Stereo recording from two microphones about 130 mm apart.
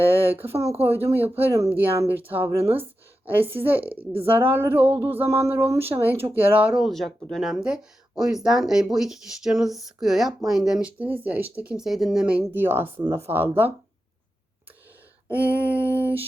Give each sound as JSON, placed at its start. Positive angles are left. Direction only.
{"t": 0.0, "sound": "speech", "side_deg": -15}
{"t": 15.3, "sound": "speech", "side_deg": -10}